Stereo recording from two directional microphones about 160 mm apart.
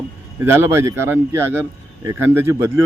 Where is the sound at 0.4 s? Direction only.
15° right (ahead or behind).